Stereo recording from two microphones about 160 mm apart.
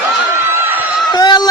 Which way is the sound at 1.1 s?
25° left (ahead or behind).